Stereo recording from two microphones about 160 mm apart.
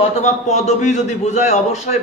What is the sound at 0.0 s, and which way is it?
A man's voice, 45° left (ahead or behind).